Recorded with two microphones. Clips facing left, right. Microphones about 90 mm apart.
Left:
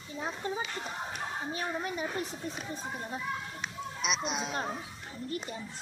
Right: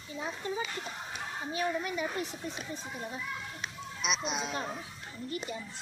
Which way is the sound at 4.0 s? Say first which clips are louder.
Even; centre (ahead or behind).